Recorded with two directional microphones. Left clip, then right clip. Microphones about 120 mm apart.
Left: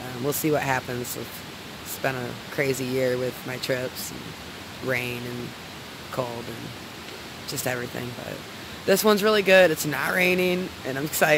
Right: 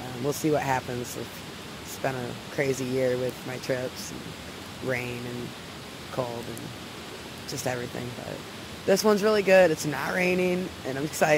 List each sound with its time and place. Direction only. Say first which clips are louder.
0.2 s speech: left 2 dB; 15° left (ahead or behind)
2.0 s speech: left 3 dB; 10° left (ahead or behind)
4.8 s speech: left 3 dB; 10° left (ahead or behind)
6.2 s speech: left 1 dB; 30° left (ahead or behind)
7.7 s speech: left 2 dB; 10° left (ahead or behind)
8.8 s speech: left 2 dB; 10° left (ahead or behind)